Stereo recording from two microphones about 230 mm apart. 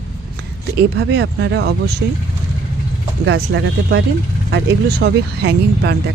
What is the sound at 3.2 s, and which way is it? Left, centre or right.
Speech, right.